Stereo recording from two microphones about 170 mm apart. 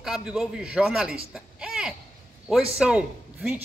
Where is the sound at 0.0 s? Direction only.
5° right (ahead or behind).